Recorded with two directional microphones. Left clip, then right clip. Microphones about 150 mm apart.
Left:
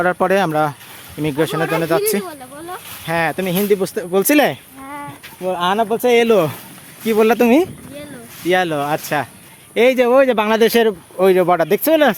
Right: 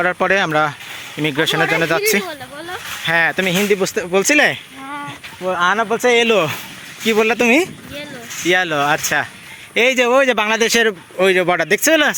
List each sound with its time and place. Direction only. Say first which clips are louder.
0.0 s speech: even; 35° left (ahead or behind)
1.2 s speech: right 2 dB; 15° left (ahead or behind)
3.1 s speech: right 3 dB; 5° left (ahead or behind); by 4.2 s 20° left (ahead or behind)
4.4 s a sound: right 1 dB; 20° left (ahead or behind)
5.5 s speech: right 1 dB; 35° left (ahead or behind)
8.4 s speech: right 1 dB; 15° left (ahead or behind)